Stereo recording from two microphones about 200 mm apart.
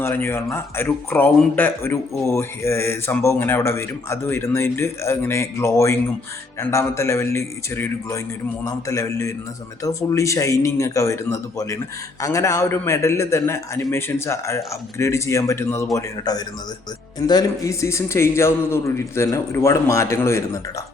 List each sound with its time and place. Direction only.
0.0 s a man's voice: 10° left (ahead or behind)